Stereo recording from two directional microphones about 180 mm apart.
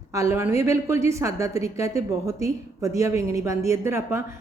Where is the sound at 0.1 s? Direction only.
15° right (ahead or behind).